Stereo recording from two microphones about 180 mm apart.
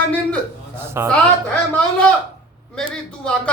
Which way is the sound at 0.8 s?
15° right (ahead or behind).